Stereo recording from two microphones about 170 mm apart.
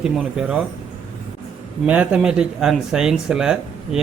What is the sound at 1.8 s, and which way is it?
A man's voice, 10° right (ahead or behind).